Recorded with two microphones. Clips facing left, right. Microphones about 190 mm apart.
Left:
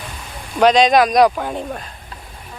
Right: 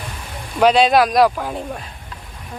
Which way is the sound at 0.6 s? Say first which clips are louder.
Left 1 dB; 5° right (ahead or behind).